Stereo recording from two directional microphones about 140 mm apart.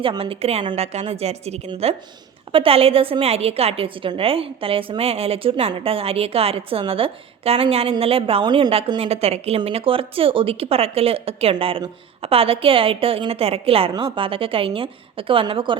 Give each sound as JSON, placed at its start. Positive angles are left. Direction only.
{"t": 0.0, "sound": "a woman's voice", "side_deg": -40}